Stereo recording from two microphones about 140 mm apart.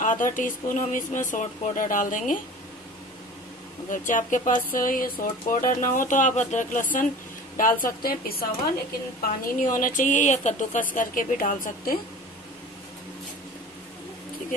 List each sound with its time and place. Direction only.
0.0 s a sound: 65° left (ahead or behind)
0.4 s speech: 65° left (ahead or behind)
3.9 s speech: 70° left (ahead or behind)
7.8 s a woman's voice: 90° left; by 10.9 s 60° left (ahead or behind)
11.0 s speech: 75° left (ahead or behind)